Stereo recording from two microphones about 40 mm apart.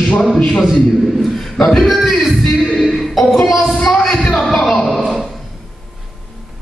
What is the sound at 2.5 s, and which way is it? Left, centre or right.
Music, centre.